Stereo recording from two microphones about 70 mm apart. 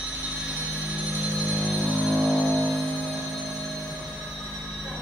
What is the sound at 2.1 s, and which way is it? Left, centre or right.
Music, centre.